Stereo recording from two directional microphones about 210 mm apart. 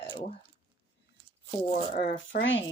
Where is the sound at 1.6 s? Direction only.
35° left (ahead or behind).